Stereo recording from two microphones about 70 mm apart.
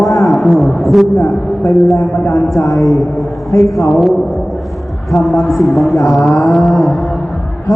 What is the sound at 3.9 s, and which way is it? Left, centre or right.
Mantra, centre.